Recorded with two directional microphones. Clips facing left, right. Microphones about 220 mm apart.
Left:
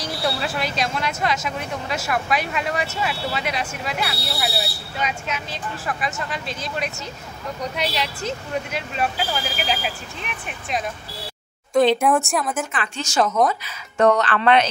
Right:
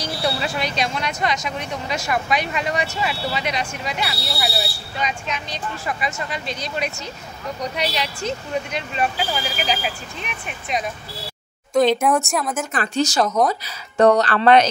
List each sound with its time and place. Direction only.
0.0 s speech: centre (ahead or behind)
12.7 s speech: 40° right (ahead or behind)